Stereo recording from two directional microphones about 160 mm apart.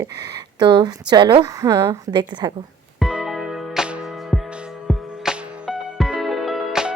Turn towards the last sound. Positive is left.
turn(degrees=0)  # may be behind; listen again after turning